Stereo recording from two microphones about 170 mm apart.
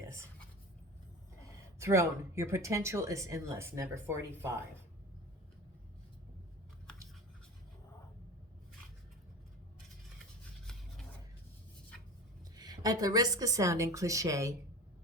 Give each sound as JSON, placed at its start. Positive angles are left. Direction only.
{"t": 1.8, "sound": "speech", "side_deg": -15}
{"t": 12.5, "sound": "a woman's voice", "side_deg": -20}